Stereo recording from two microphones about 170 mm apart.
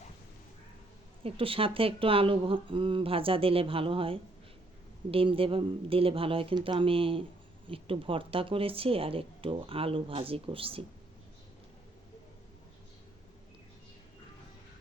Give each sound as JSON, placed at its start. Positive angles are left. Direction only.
{"t": 1.2, "sound": "speech", "side_deg": -35}